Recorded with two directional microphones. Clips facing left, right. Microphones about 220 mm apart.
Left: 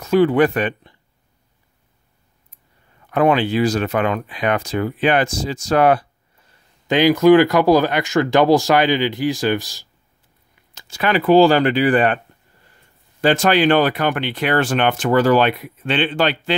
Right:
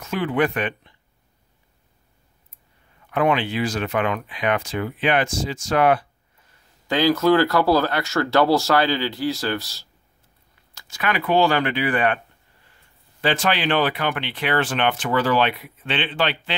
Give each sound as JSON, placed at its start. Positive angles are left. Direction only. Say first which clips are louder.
{"t": 0.0, "sound": "speech", "louder": "left 8 dB", "side_deg": 35}
{"t": 3.1, "sound": "speech", "louder": "left 5 dB", "side_deg": 40}
{"t": 6.9, "sound": "speech", "louder": "left 6 dB", "side_deg": 15}
{"t": 10.7, "sound": "speech", "louder": "left 6 dB", "side_deg": 30}
{"t": 13.2, "sound": "speech", "louder": "left 7 dB", "side_deg": 45}